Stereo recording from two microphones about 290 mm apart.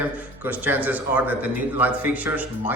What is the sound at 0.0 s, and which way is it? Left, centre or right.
Speech, centre.